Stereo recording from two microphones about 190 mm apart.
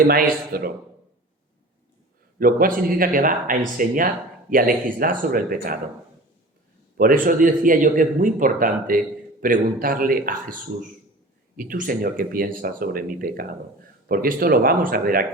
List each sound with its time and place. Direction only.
0.0 s speech: 50° right (ahead or behind)
2.4 s speech: 50° right (ahead or behind)
6.9 s speech: 50° right (ahead or behind)